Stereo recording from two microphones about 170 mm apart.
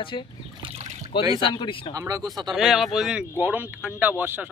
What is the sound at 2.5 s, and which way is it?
Speech, centre (ahead or behind).